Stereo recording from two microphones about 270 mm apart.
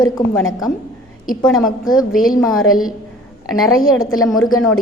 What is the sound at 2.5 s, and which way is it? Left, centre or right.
A woman's voice, left.